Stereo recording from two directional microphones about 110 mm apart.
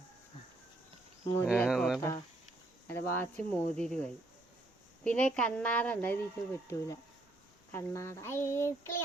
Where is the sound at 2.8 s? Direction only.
20° left (ahead or behind).